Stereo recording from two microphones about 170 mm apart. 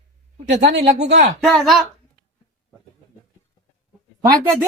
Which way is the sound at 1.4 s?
Centre (ahead or behind).